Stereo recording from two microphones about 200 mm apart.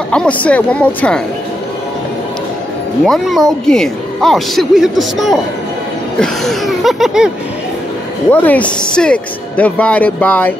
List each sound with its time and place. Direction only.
0.1 s a woman's voice: 5° left (ahead or behind)
3.1 s a woman's voice: centre (ahead or behind)
8.3 s speech: 10° left (ahead or behind)